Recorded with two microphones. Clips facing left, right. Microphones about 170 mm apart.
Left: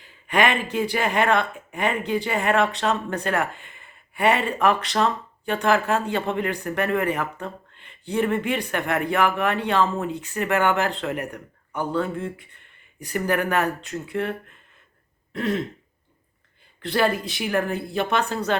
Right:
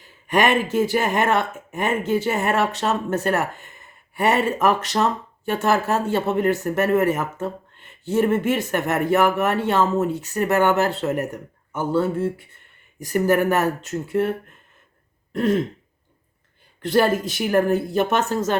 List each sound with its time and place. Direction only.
0.7 s speech: 45° right (ahead or behind)
15.3 s throat clearing: 45° right (ahead or behind)
16.8 s speech: 45° right (ahead or behind)